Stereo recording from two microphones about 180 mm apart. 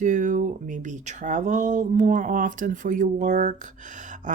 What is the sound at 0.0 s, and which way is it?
Speech, 45° right (ahead or behind).